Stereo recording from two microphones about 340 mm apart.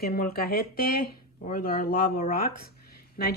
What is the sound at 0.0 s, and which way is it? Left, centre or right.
Speech, left.